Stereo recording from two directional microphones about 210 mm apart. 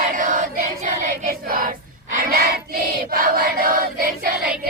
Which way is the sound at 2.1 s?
45° right (ahead or behind).